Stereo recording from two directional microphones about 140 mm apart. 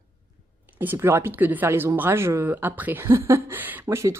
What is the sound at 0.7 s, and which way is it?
Speech, 15° right (ahead or behind).